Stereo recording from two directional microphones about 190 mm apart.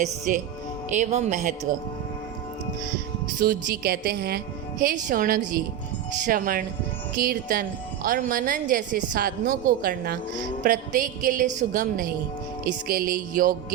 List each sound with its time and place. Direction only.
0.0 s a woman's voice: 45° right (ahead or behind)
3.4 s music: 50° right (ahead or behind)
4.8 s a woman's voice: 45° right (ahead or behind)